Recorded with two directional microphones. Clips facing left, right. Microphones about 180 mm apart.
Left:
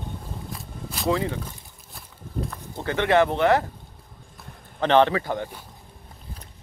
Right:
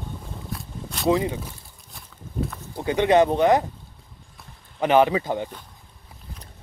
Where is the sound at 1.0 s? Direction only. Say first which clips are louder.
Right 3 dB; 20° right (ahead or behind).